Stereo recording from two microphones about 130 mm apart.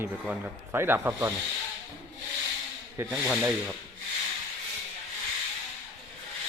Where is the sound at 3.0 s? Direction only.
15° right (ahead or behind).